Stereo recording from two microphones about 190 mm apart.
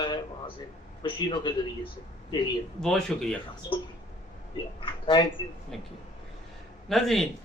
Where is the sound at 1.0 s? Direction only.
25° left (ahead or behind).